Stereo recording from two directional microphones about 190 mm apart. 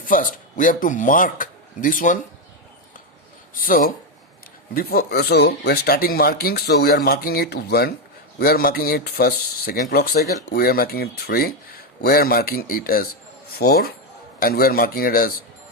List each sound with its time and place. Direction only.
0.0 s speech: 45° left (ahead or behind)
3.5 s speech: 45° left (ahead or behind)